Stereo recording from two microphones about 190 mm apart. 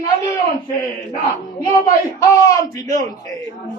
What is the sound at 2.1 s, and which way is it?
Speech, 15° left (ahead or behind).